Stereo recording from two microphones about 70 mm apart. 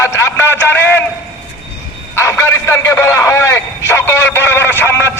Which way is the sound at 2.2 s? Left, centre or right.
Left.